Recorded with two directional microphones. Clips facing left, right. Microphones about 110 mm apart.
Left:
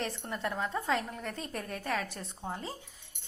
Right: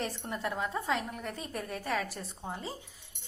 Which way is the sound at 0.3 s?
10° right (ahead or behind).